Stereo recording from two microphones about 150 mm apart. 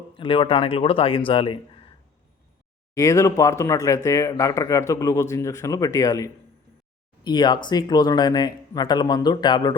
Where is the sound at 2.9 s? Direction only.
20° left (ahead or behind).